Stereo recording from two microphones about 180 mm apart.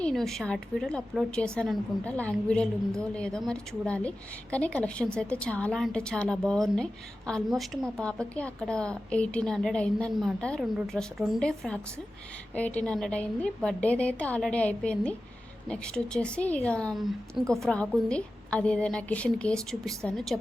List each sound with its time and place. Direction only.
0.0 s a woman's voice: centre (ahead or behind)